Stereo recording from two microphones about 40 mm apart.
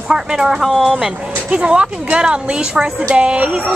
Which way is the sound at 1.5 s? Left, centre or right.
Right.